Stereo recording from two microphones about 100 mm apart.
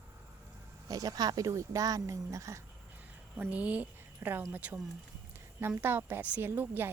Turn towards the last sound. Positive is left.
turn(degrees=-20)  # may be behind; listen again after turning